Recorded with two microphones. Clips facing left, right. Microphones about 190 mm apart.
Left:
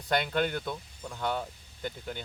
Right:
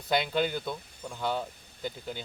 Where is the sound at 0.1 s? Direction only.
5° right (ahead or behind).